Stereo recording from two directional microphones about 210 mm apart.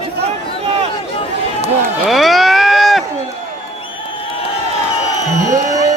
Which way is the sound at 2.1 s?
Centre (ahead or behind).